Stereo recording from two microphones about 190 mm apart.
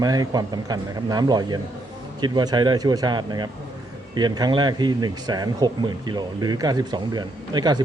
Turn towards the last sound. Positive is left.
turn(degrees=-20)  # may be behind; listen again after turning